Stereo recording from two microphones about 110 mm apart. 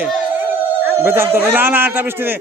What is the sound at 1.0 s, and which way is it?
Speech, 20° right (ahead or behind).